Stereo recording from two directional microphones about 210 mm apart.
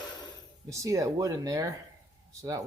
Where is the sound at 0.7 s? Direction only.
15° right (ahead or behind).